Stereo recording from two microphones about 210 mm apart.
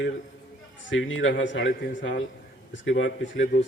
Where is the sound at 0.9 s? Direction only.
65° left (ahead or behind).